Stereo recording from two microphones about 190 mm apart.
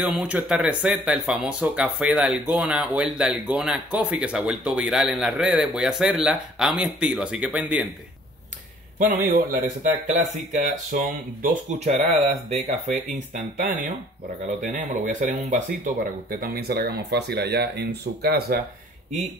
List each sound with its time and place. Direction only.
0.0 s speech: 5° right (ahead or behind)
8.9 s a man's voice: 45° right (ahead or behind)
14.6 s speech: 40° right (ahead or behind); by 18.6 s 55° right (ahead or behind)